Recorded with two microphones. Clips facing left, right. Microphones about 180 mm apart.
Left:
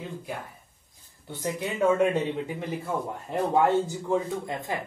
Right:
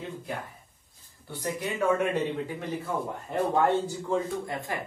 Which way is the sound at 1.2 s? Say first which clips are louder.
Left 1 dB; 20° left (ahead or behind).